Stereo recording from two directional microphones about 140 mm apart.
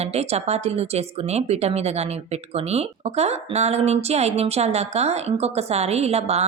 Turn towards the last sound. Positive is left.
turn(degrees=-50)  # may be behind; listen again after turning